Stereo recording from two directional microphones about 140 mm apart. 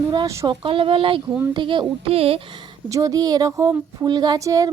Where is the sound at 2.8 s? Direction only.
25° right (ahead or behind).